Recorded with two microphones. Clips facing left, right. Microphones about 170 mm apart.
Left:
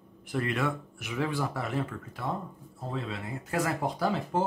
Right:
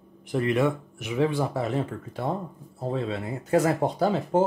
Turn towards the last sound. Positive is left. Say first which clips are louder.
# right 6 dB
turn(degrees=-25)  # may be behind; listen again after turning